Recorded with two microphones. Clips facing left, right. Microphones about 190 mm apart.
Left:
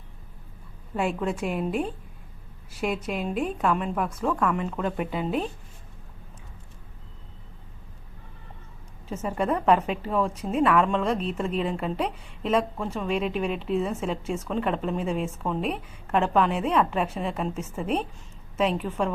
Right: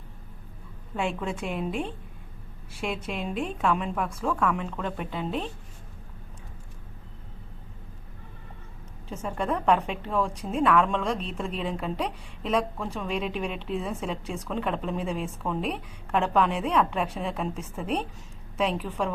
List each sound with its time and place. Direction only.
0.9 s a woman's voice: 5° left (ahead or behind)
9.0 s a woman's voice: 5° left (ahead or behind)